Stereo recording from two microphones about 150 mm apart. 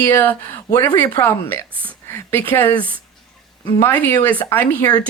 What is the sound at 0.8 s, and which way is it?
Speech, 25° left (ahead or behind).